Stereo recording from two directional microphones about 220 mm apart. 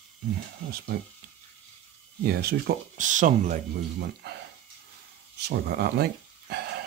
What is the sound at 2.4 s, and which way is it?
Speech, 40° right (ahead or behind).